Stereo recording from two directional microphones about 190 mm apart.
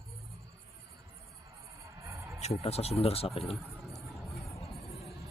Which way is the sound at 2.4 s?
35° left (ahead or behind).